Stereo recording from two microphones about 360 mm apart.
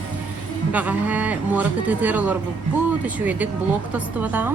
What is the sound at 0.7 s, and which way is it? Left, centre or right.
Speech, centre.